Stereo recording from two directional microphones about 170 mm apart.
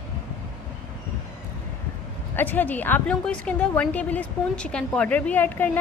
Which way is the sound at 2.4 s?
10° left (ahead or behind).